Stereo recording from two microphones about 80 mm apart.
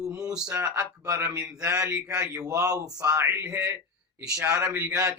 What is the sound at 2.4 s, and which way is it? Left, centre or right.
Speech, right.